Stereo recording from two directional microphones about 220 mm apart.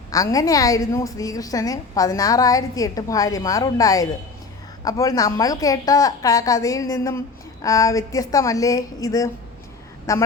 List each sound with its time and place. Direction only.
0.1 s a woman's voice: 15° left (ahead or behind)